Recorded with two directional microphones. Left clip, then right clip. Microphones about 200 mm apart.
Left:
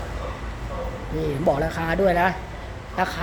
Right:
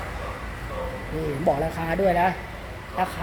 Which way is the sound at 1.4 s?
5° left (ahead or behind).